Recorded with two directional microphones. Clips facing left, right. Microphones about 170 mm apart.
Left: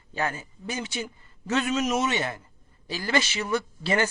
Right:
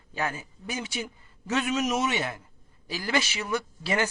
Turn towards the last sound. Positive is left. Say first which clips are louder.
# left 2 dB
turn(degrees=-10)  # may be behind; listen again after turning